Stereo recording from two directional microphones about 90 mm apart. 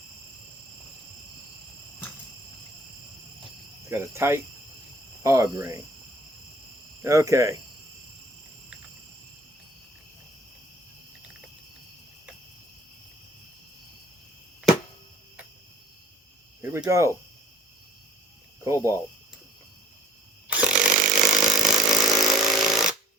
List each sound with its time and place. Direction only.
3.8 s speech: 30° right (ahead or behind)
7.0 s speech: 35° right (ahead or behind)
16.6 s cricket: 30° right (ahead or behind)
18.6 s speech: 35° right (ahead or behind)
20.5 s chainsaw: 10° right (ahead or behind)